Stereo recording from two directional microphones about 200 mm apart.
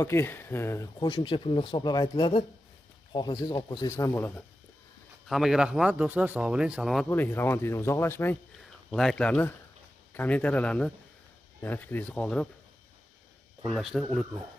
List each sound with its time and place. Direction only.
0.0 s speech: 10° left (ahead or behind)
5.2 s speech: centre (ahead or behind)
13.7 s speech: centre (ahead or behind)